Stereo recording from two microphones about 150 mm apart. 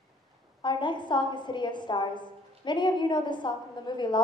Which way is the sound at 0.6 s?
30° left (ahead or behind).